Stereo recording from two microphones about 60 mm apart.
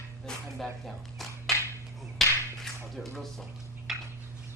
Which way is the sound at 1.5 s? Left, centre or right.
Centre.